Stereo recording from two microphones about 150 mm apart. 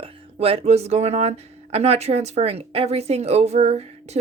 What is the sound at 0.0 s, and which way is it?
Speech, 40° right (ahead or behind).